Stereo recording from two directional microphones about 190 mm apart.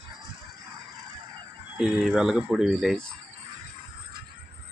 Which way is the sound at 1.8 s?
Centre (ahead or behind).